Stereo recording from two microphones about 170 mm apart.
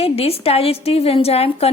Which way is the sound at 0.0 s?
35° left (ahead or behind).